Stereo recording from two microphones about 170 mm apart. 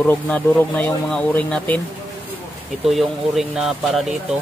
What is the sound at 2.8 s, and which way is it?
Speech, centre (ahead or behind).